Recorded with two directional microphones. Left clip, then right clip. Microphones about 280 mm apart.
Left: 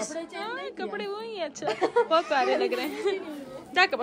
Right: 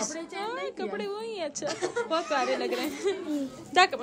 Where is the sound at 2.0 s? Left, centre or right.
Centre.